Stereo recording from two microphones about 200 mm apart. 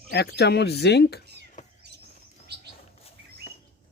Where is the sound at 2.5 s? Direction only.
55° right (ahead or behind).